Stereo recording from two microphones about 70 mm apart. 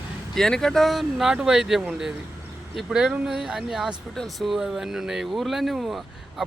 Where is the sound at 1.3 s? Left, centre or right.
Centre.